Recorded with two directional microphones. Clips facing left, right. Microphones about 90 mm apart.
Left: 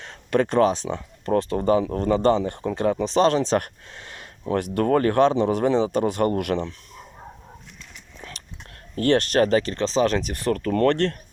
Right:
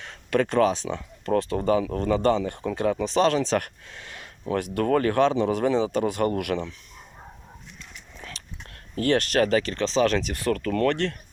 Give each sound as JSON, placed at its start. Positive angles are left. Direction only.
{"t": 0.0, "sound": "speech", "side_deg": 25}
{"t": 9.0, "sound": "speech", "side_deg": 25}